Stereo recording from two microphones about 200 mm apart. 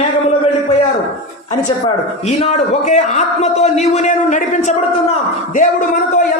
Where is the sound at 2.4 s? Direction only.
35° left (ahead or behind).